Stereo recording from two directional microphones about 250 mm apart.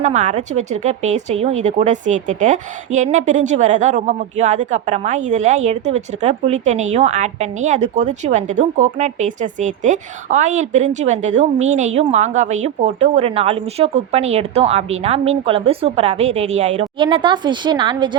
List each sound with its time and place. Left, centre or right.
0.0 s speech: right